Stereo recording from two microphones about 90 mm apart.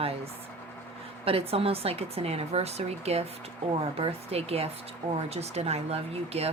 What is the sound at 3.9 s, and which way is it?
Speech, 90° right.